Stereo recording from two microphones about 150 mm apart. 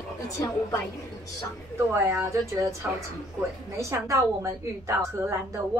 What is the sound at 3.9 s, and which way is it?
A woman's voice, 20° right (ahead or behind).